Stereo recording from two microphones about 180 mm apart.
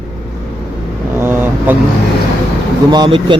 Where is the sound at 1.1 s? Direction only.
15° right (ahead or behind).